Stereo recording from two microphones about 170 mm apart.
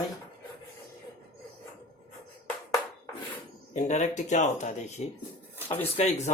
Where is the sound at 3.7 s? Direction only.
45° left (ahead or behind).